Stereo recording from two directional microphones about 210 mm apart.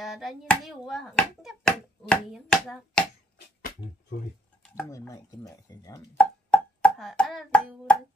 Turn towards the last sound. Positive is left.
turn(degrees=5)  # may be behind; listen again after turning